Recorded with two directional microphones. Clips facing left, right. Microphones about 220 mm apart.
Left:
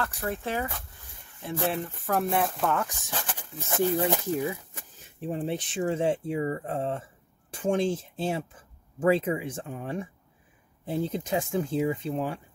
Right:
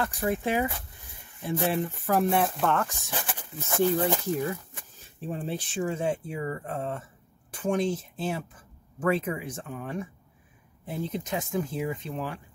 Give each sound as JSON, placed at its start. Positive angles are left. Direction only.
{"t": 0.0, "sound": "speech", "side_deg": -15}
{"t": 3.1, "sound": "speech", "side_deg": -15}
{"t": 3.3, "sound": "speech", "side_deg": 10}